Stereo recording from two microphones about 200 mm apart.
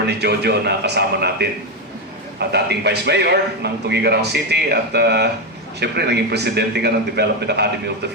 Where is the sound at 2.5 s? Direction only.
55° right (ahead or behind).